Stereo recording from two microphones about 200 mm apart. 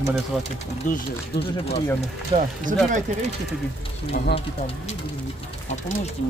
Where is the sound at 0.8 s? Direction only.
40° left (ahead or behind).